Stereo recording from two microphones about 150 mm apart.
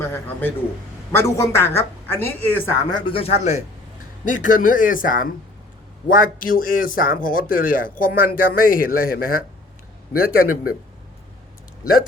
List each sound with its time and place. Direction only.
0.0 s a woman's voice: 15° left (ahead or behind)
2.8 s speech: 30° left (ahead or behind)
4.3 s a man's voice: 60° left (ahead or behind)